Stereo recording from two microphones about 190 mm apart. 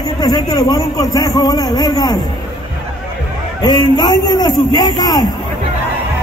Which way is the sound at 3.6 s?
20° left (ahead or behind).